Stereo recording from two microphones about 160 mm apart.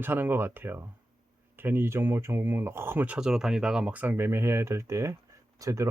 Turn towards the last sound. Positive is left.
turn(degrees=-20)  # may be behind; listen again after turning